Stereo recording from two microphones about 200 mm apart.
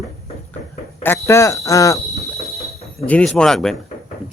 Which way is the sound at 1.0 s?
15° left (ahead or behind).